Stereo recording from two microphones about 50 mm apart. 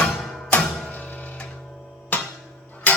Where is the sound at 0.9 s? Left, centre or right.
Left.